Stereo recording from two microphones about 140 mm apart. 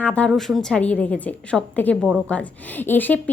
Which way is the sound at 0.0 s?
10° left (ahead or behind).